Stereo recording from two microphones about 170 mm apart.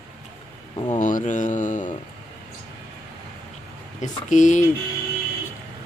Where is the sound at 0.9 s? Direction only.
50° left (ahead or behind).